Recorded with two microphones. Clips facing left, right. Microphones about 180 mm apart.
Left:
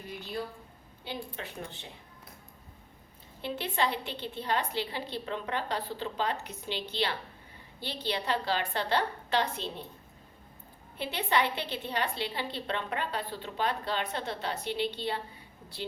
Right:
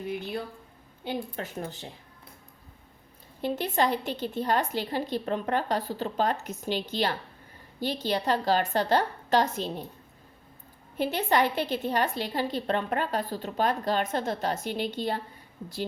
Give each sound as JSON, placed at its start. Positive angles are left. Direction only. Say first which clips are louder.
{"t": 1.0, "sound": "a woman's voice", "louder": "right 6 dB", "side_deg": -45}
{"t": 3.4, "sound": "a woman's voice", "louder": "right 5 dB", "side_deg": -45}
{"t": 10.9, "sound": "a woman's voice", "louder": "right 5 dB", "side_deg": -45}